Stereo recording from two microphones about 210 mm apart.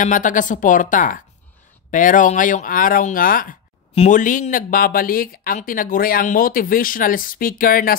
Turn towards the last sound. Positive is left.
turn(degrees=40)  # may be behind; listen again after turning